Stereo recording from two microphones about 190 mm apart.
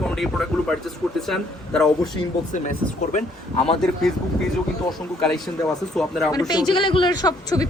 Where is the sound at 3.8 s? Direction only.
Centre (ahead or behind).